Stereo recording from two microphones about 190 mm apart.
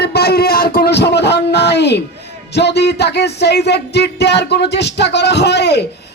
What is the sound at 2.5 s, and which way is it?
Speech, 60° left (ahead or behind).